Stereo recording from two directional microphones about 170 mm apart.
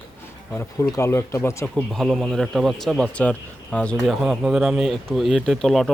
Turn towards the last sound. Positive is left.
turn(degrees=0)  # may be behind; listen again after turning